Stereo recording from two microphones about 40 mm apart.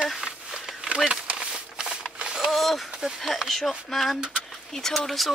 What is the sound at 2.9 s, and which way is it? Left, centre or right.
Speech, centre.